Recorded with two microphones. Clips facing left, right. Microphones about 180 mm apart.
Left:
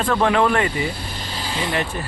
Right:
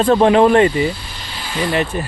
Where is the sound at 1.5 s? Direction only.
25° left (ahead or behind).